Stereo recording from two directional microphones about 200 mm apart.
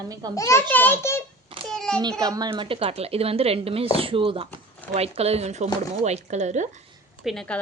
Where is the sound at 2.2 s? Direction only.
20° right (ahead or behind); by 6.8 s 35° right (ahead or behind).